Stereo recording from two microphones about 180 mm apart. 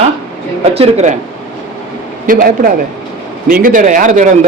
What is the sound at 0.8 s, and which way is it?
Speech, 40° right (ahead or behind).